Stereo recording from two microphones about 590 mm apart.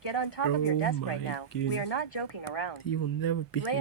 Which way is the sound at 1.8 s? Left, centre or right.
Left.